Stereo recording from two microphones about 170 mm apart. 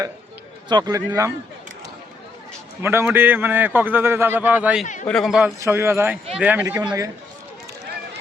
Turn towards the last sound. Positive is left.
turn(degrees=-20)  # may be behind; listen again after turning